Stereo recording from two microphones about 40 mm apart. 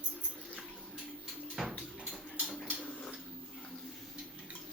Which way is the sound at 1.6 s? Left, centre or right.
Centre.